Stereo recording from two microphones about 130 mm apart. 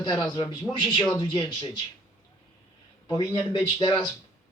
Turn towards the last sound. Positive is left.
turn(degrees=35)  # may be behind; listen again after turning